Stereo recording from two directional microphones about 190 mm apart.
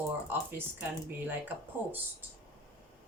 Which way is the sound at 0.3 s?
10° right (ahead or behind).